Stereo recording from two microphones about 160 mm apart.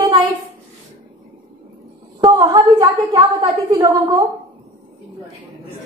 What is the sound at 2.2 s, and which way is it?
A woman's voice, 25° right (ahead or behind).